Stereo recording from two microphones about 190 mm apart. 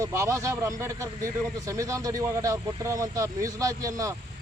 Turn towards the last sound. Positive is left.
turn(degrees=-15)  # may be behind; listen again after turning